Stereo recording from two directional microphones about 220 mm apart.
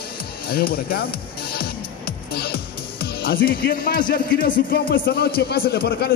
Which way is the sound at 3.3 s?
45° left (ahead or behind).